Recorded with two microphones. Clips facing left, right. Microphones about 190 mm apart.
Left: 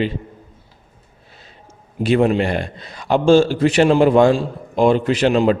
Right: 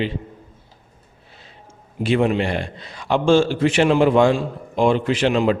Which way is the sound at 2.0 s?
40° left (ahead or behind).